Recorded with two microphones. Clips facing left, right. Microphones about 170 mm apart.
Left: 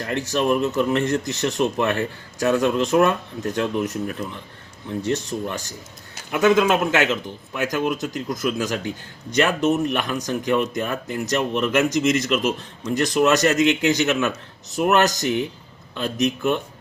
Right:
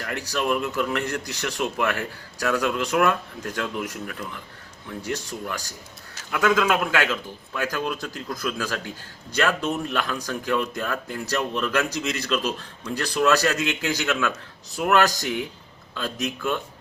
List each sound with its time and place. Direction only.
0.0 s speech: 20° left (ahead or behind)